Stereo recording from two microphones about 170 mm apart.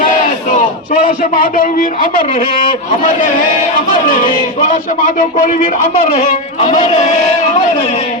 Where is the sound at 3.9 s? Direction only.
50° left (ahead or behind).